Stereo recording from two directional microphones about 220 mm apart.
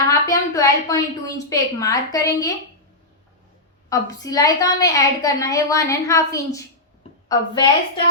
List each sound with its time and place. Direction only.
0.1 s a woman's voice: 15° left (ahead or behind)
3.8 s a woman's voice: 15° left (ahead or behind)